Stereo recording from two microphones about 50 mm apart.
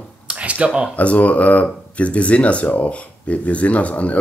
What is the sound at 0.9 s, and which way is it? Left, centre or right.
Speech, left.